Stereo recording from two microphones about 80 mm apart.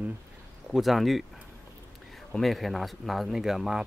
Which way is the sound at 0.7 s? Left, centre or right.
Centre.